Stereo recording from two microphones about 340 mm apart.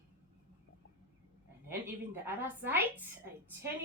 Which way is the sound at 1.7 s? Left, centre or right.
Centre.